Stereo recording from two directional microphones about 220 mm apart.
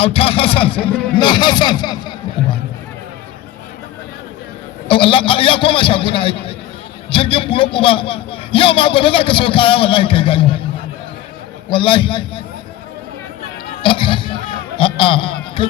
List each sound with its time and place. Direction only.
0.0 s a man's voice: 25° left (ahead or behind)
4.9 s a man's voice: 25° left (ahead or behind)
11.7 s a man's voice: 20° left (ahead or behind)
13.8 s music: 25° left (ahead or behind)